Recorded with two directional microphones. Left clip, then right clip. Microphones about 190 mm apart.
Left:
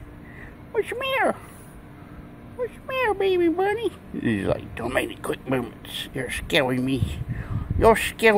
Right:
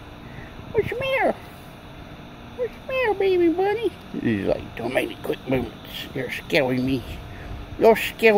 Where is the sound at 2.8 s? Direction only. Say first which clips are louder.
Right 1 dB; 20° left (ahead or behind).